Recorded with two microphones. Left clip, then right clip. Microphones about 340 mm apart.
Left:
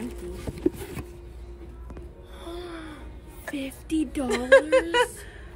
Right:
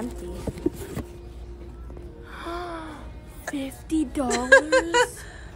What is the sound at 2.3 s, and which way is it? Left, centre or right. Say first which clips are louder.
Music: right 6 dB; right.